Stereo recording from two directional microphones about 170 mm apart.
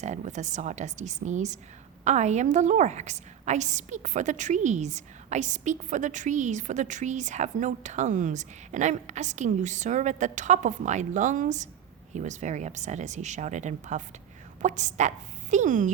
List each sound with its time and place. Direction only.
0.0 s a woman's voice: 45° right (ahead or behind)